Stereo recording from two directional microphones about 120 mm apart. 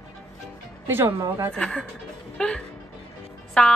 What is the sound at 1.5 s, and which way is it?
Speech, 10° left (ahead or behind).